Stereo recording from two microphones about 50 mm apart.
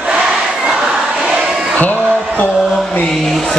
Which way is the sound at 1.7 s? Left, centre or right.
Left.